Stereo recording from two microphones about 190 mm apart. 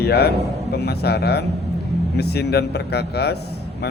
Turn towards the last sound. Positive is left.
turn(degrees=60)  # may be behind; listen again after turning